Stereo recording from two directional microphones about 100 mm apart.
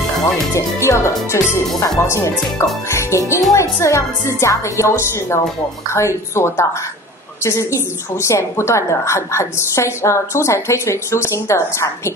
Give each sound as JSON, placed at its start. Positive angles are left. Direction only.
{"t": 0.6, "sound": "a woman's voice", "side_deg": 30}